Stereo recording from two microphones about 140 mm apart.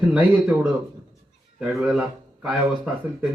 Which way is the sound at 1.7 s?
Centre (ahead or behind).